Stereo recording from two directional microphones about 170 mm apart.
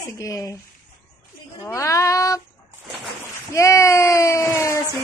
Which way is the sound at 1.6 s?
20° left (ahead or behind).